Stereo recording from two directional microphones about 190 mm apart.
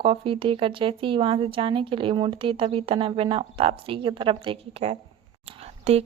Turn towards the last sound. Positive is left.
turn(degrees=-35)  # may be behind; listen again after turning